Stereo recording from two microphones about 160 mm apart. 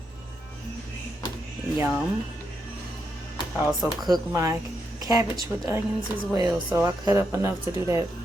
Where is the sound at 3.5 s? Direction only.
Centre (ahead or behind).